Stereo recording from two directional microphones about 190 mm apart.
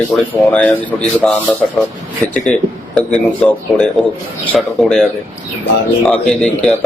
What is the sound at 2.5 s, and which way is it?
Speech, 5° left (ahead or behind).